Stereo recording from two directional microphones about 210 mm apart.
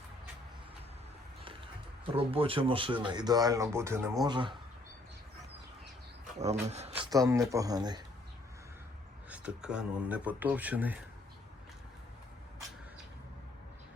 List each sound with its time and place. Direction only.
2.1 s speech: 25° right (ahead or behind)
6.2 s speech: 30° right (ahead or behind)
7.0 s speech: 15° right (ahead or behind)
9.3 s speech: 5° right (ahead or behind)